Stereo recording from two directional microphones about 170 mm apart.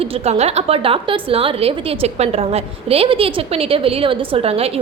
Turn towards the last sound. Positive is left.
turn(degrees=-35)  # may be behind; listen again after turning